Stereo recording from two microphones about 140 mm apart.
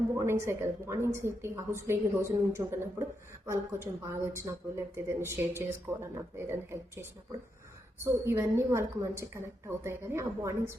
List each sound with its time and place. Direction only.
0.2 s a woman's voice: 20° right (ahead or behind)